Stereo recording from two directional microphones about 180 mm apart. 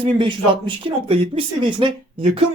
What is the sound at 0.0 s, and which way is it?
Speech, 25° right (ahead or behind).